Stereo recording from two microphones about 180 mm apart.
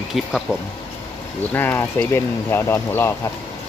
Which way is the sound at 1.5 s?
10° left (ahead or behind).